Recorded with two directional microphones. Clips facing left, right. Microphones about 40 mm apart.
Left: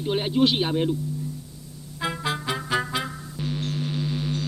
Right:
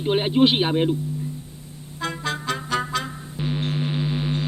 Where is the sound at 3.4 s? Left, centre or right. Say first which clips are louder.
Right 3 dB; right.